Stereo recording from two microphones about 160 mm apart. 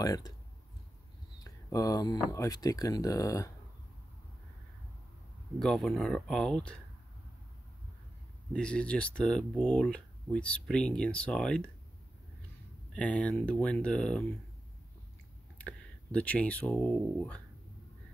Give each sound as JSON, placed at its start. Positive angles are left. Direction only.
{"t": 0.0, "sound": "speech", "side_deg": 25}
{"t": 1.4, "sound": "a sound", "side_deg": 20}
{"t": 2.3, "sound": "speech", "side_deg": 20}
{"t": 5.6, "sound": "speech", "side_deg": 5}
{"t": 8.5, "sound": "speech", "side_deg": 5}
{"t": 12.9, "sound": "speech", "side_deg": 5}
{"t": 15.5, "sound": "speech", "side_deg": 10}